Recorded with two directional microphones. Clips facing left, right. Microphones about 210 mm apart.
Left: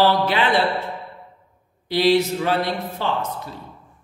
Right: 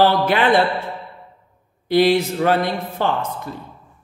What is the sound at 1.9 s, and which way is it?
Speech, 50° right (ahead or behind).